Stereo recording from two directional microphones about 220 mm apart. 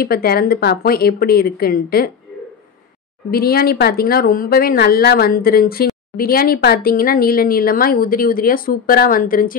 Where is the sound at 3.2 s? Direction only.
45° left (ahead or behind).